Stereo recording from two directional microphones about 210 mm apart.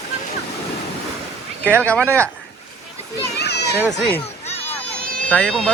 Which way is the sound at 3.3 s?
55° left (ahead or behind).